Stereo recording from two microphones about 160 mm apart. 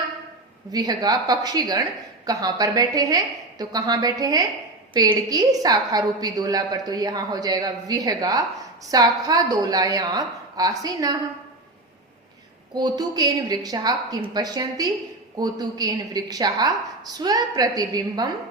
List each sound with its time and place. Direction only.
0.7 s a woman's voice: 25° right (ahead or behind)
12.7 s a woman's voice: 25° right (ahead or behind)